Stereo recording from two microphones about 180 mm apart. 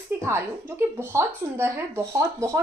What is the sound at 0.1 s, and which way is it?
Speech, 15° right (ahead or behind).